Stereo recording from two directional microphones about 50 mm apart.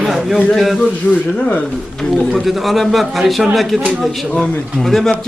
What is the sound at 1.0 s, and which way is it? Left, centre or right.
Speech, left.